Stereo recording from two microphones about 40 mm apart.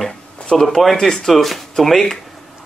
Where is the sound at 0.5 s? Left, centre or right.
Centre.